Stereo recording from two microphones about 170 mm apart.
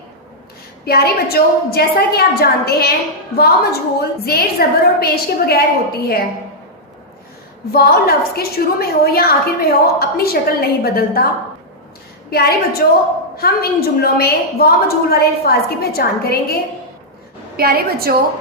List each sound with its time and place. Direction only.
0.9 s a woman's voice: 65° left (ahead or behind)
7.7 s a woman's voice: 65° left (ahead or behind)
12.3 s a woman's voice: 65° left (ahead or behind)
17.6 s a woman's voice: 65° right (ahead or behind)